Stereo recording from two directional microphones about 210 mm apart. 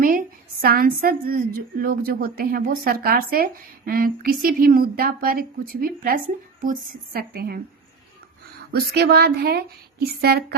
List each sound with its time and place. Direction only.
0.0 s a woman's voice: 40° right (ahead or behind)
8.7 s a woman's voice: 50° right (ahead or behind)